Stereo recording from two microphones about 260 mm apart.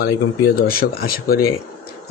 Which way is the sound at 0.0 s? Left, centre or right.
Left.